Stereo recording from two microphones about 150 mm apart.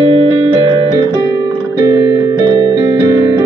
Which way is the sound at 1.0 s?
20° right (ahead or behind).